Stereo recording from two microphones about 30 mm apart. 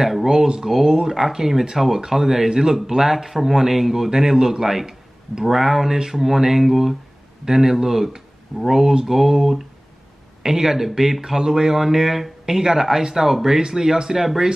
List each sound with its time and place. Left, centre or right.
0.0 s speech: centre